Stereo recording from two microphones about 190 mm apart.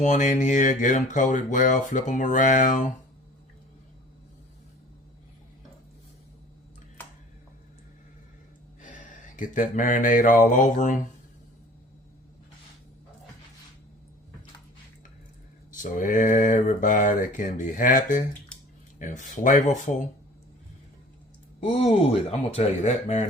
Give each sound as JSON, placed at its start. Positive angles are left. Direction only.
{"t": 0.0, "sound": "speech", "side_deg": 40}
{"t": 8.8, "sound": "mantra", "side_deg": 40}
{"t": 15.7, "sound": "speech", "side_deg": 45}
{"t": 21.6, "sound": "speech", "side_deg": 35}